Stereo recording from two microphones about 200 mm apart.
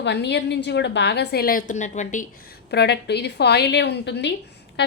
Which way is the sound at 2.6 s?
55° left (ahead or behind).